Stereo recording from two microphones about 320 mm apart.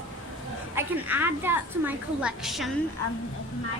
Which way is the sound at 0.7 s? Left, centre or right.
Centre.